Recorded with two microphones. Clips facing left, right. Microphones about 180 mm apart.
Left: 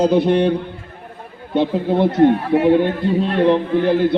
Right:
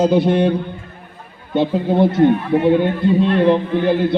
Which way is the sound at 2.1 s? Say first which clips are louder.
Even; 35° left (ahead or behind).